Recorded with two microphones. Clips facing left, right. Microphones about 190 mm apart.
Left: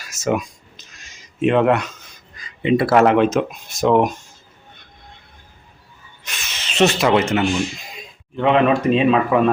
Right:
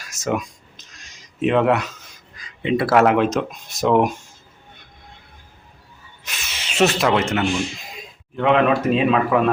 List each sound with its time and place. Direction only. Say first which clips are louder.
0.0 s speech: left 3 dB; centre (ahead or behind)
6.2 s rub: left 1 dB; 5° right (ahead or behind)
8.4 s speech: left 1 dB; centre (ahead or behind)